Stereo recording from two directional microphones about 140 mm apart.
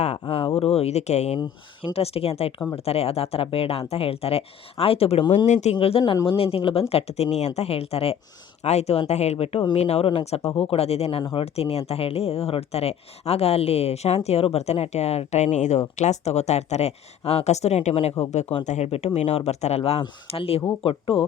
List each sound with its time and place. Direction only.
0.0 s a sound: 45° left (ahead or behind)
0.6 s speech: 45° left (ahead or behind)
1.4 s speech: 40° left (ahead or behind)
5.7 s speech: 35° left (ahead or behind)